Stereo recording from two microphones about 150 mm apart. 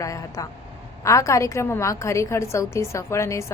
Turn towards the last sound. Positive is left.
turn(degrees=20)  # may be behind; listen again after turning